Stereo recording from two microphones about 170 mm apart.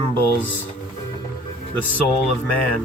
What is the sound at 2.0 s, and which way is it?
Speech, 10° left (ahead or behind).